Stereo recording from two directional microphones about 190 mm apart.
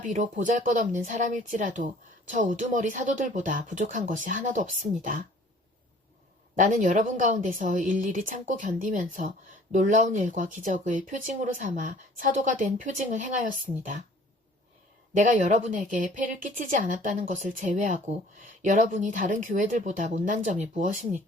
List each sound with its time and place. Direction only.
0.0 s speech: 40° right (ahead or behind)
6.6 s a woman's voice: 45° right (ahead or behind)
15.1 s speech: 40° right (ahead or behind)